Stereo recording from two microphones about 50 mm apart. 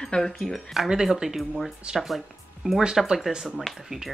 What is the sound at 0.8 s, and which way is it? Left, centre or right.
Speech, centre.